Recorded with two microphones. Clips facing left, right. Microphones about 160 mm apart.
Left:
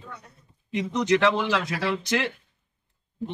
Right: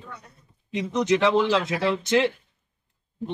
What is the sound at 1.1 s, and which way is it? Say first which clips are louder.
Speech: right 2 dB; 20° right (ahead or behind).